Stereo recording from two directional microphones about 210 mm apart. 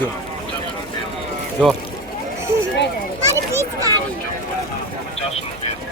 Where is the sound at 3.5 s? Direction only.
15° right (ahead or behind).